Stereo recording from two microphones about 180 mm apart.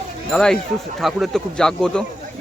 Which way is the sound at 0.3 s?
5° left (ahead or behind).